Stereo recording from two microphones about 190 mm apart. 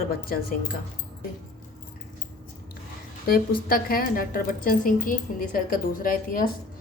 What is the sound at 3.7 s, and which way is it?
A woman's voice, 50° left (ahead or behind).